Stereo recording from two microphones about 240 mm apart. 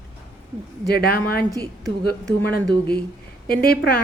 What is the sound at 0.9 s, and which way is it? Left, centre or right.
Speech, left.